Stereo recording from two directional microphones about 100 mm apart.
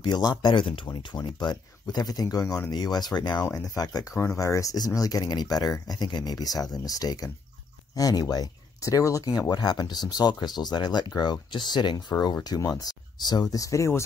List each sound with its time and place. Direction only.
0.0 s speech: 45° left (ahead or behind)
2.7 s speech: 45° left (ahead or behind)
3.4 s speech: 35° left (ahead or behind)